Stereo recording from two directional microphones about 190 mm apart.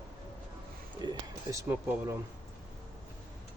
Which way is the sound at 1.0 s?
20° right (ahead or behind).